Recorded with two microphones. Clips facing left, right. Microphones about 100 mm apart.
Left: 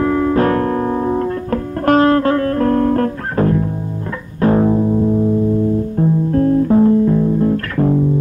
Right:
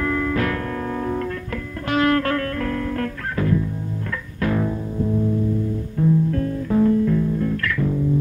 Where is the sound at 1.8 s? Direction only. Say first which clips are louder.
Left 8 dB; 40° left (ahead or behind).